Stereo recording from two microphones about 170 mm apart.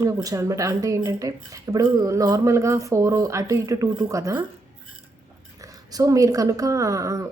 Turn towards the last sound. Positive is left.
turn(degrees=-20)  # may be behind; listen again after turning